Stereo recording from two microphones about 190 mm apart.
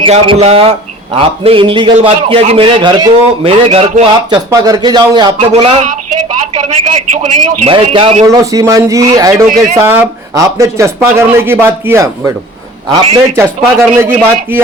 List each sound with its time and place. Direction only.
0.0 s a man's voice: 30° right (ahead or behind)
4.5 s a man's voice: 20° right (ahead or behind)
5.4 s a man's voice: 35° right (ahead or behind); by 14.6 s 10° right (ahead or behind)